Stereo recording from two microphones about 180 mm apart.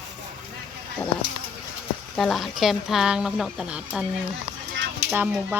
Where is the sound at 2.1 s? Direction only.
Centre (ahead or behind).